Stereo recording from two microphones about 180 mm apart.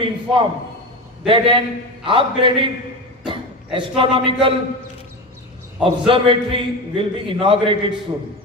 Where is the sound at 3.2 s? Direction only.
25° right (ahead or behind).